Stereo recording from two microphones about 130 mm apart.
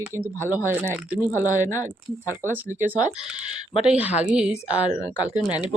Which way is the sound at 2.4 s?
20° left (ahead or behind).